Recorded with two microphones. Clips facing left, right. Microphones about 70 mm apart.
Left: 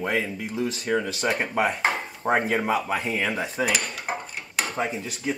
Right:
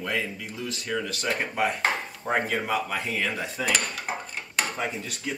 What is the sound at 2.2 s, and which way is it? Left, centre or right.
Speech, left.